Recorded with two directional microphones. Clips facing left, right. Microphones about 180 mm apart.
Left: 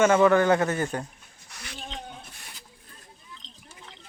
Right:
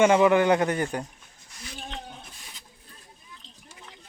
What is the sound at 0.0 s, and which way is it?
Speech, 15° right (ahead or behind).